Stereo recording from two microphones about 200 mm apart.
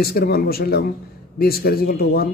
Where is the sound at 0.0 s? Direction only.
50° left (ahead or behind).